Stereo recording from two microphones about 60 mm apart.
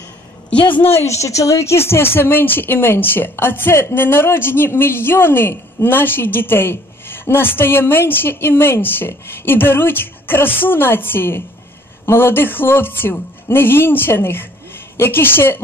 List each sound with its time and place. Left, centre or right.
1.1 s speech: left